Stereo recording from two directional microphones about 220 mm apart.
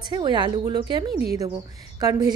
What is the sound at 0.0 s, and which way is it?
A woman's voice, 20° right (ahead or behind).